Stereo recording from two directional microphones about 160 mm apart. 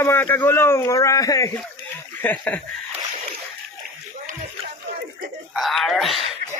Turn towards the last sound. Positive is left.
turn(degrees=0)  # may be behind; listen again after turning